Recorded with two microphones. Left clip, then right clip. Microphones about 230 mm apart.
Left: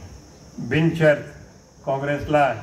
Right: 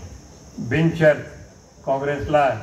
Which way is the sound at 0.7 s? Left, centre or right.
Left.